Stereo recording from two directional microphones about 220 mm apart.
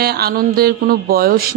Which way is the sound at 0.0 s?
45° right (ahead or behind).